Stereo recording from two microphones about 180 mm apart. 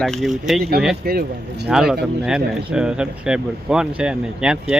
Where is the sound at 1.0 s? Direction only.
60° right (ahead or behind).